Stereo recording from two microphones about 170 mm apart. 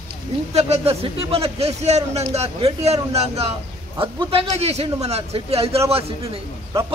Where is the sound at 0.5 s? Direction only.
35° right (ahead or behind).